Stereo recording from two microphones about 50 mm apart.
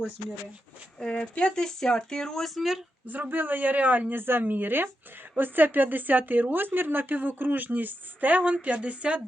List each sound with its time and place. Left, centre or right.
0.9 s speech: centre
2.6 s speech: centre
3.1 s a woman's voice: right